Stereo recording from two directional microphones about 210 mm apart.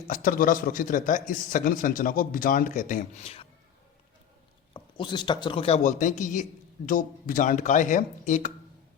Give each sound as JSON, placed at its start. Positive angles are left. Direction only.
{"t": 0.1, "sound": "speech", "side_deg": 40}
{"t": 4.7, "sound": "speech", "side_deg": 20}